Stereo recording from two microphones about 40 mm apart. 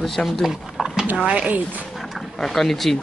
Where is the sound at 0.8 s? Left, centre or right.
Centre.